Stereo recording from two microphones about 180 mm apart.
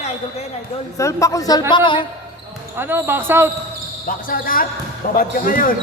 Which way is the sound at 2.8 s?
10° right (ahead or behind).